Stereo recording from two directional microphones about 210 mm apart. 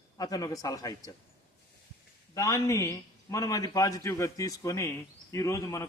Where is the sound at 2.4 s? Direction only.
15° left (ahead or behind).